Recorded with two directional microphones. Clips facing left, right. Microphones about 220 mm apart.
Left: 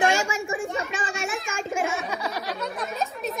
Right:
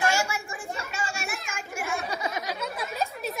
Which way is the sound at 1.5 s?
30° left (ahead or behind).